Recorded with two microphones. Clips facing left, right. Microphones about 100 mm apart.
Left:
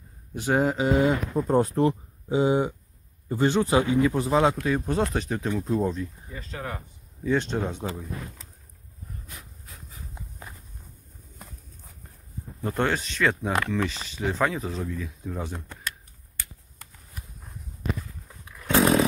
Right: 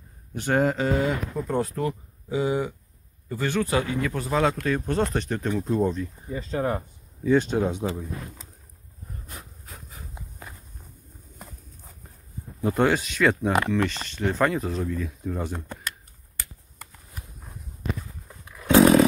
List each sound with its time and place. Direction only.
0.3 s speech: 5° left (ahead or behind)
0.8 s speech: 20° left (ahead or behind)
1.3 s speech: 30° left (ahead or behind)
4.6 s speech: 10° left (ahead or behind)
6.3 s speech: 30° right (ahead or behind)
7.2 s speech: 5° right (ahead or behind)
12.6 s speech: 5° right (ahead or behind)
18.4 s chainsaw: 5° right (ahead or behind)